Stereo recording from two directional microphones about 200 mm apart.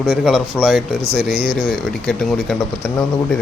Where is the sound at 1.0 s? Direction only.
50° right (ahead or behind).